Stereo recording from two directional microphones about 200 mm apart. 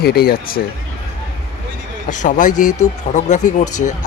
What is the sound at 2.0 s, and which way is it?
Speech, 40° left (ahead or behind).